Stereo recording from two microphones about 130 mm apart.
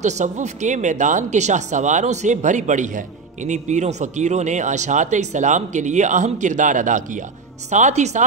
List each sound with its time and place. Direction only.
0.0 s speech: 65° right (ahead or behind); by 7.0 s 80° right
7.7 s a woman's voice: 65° right (ahead or behind)